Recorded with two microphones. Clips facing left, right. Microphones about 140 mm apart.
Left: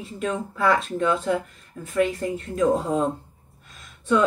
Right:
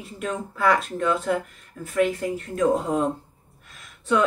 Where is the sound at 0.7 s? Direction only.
25° left (ahead or behind).